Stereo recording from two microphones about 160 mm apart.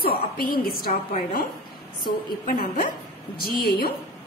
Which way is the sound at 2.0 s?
60° left (ahead or behind).